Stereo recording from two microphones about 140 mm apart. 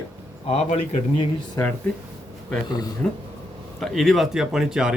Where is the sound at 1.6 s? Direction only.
20° left (ahead or behind).